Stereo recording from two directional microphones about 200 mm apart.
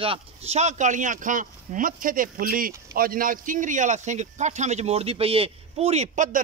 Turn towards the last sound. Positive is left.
turn(degrees=-35)  # may be behind; listen again after turning